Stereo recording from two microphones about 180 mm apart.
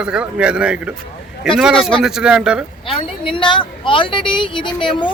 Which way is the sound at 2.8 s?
30° left (ahead or behind).